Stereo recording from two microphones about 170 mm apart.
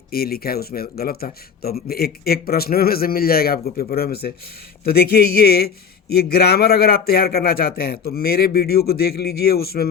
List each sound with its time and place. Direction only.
0.1 s speech: 65° left (ahead or behind)